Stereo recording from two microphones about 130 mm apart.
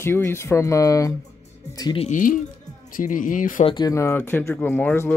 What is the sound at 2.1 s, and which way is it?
Speech, 90° left.